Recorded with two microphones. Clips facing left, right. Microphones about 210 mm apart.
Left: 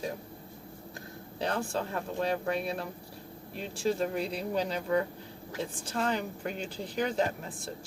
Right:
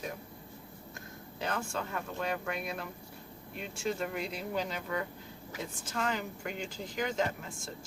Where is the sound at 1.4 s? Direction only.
35° left (ahead or behind).